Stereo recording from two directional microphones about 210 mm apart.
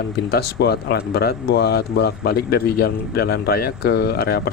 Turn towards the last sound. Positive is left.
turn(degrees=45)  # may be behind; listen again after turning